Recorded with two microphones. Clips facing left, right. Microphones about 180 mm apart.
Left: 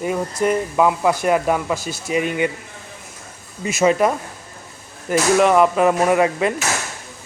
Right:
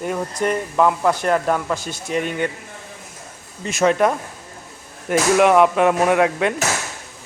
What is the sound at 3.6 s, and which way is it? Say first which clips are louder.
Speech: left 1 dB; 5° left (ahead or behind).